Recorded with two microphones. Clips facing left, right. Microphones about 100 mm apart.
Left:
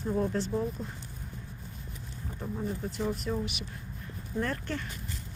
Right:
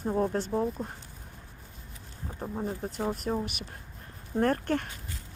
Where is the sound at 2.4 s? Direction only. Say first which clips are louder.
Right 1 dB; 35° right (ahead or behind); by 4.9 s 50° right (ahead or behind).